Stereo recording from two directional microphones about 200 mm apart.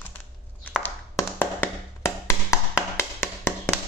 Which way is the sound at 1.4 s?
10° left (ahead or behind).